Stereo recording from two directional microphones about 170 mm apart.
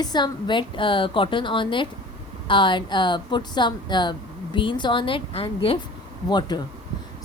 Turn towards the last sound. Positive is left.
turn(degrees=25)  # may be behind; listen again after turning